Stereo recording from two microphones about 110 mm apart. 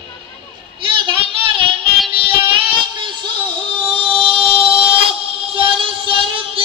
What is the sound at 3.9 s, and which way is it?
Music, 55° right (ahead or behind).